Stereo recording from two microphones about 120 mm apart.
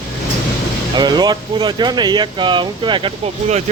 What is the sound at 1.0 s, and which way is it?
Speech, 35° right (ahead or behind).